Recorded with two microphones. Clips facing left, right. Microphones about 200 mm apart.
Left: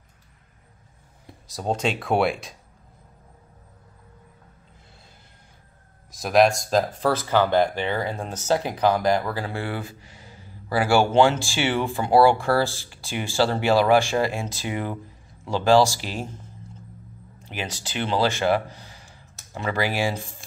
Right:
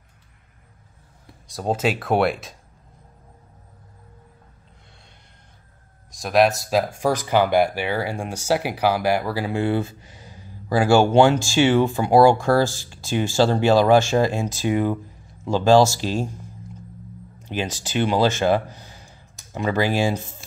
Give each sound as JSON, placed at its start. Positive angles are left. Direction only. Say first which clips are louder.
{"t": 1.5, "sound": "speech", "louder": "right 3 dB", "side_deg": -5}
{"t": 6.1, "sound": "speech", "louder": "even", "side_deg": 0}
{"t": 17.5, "sound": "speech", "louder": "right 6 dB", "side_deg": -20}